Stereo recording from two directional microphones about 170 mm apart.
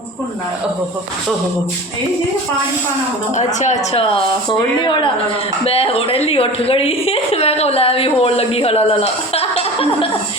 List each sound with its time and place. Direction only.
3.3 s a woman's voice: 45° left (ahead or behind)